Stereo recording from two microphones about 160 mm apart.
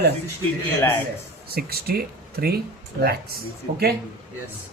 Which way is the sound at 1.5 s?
75° right (ahead or behind).